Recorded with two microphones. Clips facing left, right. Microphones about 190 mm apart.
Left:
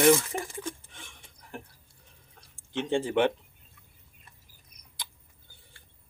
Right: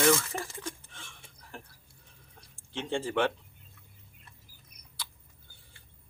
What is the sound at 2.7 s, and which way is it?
Speech, 20° left (ahead or behind).